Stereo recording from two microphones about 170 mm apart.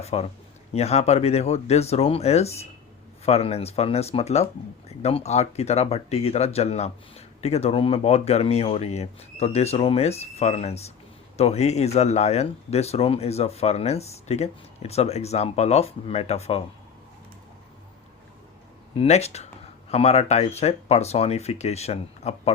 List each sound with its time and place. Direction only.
0.0 s speech: 40° left (ahead or behind)
18.9 s speech: 40° left (ahead or behind)